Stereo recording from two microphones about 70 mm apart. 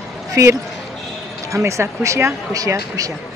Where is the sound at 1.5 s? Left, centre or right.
Right.